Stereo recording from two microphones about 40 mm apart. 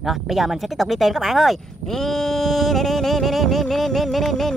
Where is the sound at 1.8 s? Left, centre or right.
Centre.